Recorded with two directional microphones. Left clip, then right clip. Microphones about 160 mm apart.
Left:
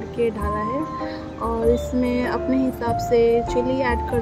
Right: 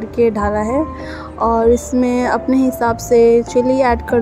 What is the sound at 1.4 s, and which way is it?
A woman's voice, 30° right (ahead or behind).